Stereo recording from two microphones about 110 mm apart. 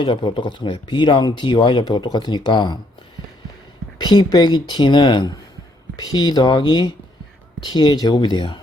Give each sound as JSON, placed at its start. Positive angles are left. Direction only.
{"t": 0.0, "sound": "speech", "side_deg": 45}
{"t": 4.0, "sound": "speech", "side_deg": 40}